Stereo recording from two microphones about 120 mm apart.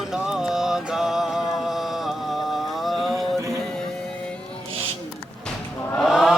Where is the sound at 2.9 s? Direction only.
Centre (ahead or behind).